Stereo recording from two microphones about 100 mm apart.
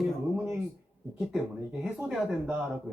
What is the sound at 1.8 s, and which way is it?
Speech, 5° right (ahead or behind).